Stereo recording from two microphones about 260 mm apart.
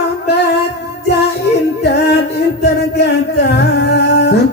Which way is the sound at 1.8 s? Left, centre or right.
Left.